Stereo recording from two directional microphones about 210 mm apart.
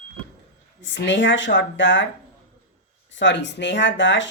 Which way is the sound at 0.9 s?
60° left (ahead or behind).